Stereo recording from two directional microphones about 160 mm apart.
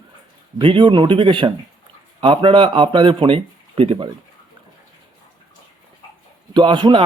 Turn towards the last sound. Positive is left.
turn(degrees=-30)  # may be behind; listen again after turning